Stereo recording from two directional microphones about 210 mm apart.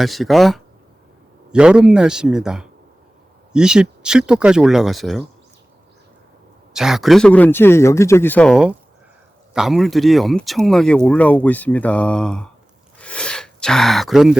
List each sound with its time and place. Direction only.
0.0 s speech: centre (ahead or behind)
6.7 s speech: centre (ahead or behind)
13.0 s a sound: 5° left (ahead or behind)